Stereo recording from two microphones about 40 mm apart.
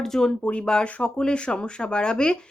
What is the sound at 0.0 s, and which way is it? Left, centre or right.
Speech, centre.